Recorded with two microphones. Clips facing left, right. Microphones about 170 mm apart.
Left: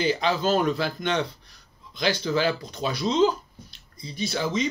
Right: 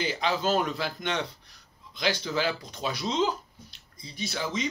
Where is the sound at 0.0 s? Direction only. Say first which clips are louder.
Left 4 dB; 15° right (ahead or behind).